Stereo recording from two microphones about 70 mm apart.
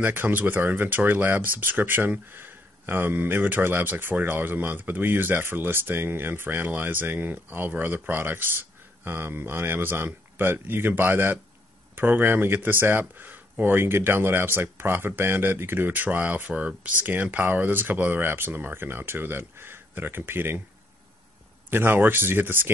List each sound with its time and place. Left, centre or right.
0.0 s speech: right
21.6 s speech: right